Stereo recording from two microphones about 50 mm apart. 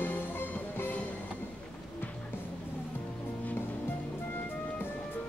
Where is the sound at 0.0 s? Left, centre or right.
Left.